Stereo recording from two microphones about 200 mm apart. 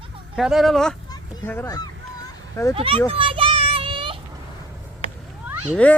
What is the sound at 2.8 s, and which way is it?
Speech, 25° right (ahead or behind).